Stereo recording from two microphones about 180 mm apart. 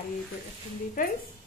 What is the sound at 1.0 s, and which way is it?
Speech, 50° left (ahead or behind).